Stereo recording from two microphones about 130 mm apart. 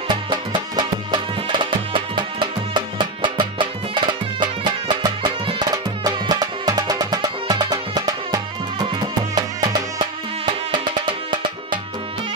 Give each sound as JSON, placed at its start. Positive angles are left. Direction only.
{"t": 0.1, "sound": "music", "side_deg": -35}